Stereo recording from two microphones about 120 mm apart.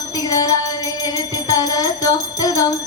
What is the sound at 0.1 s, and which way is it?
Music, 30° left (ahead or behind).